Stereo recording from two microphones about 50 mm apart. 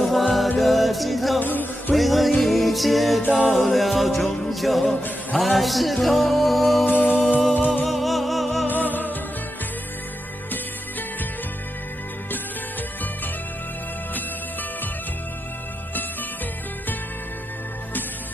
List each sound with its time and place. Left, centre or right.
0.1 s music: centre
1.4 s music: left
2.0 s music: centre
6.9 s music: left
7.8 s music: centre
8.6 s music: left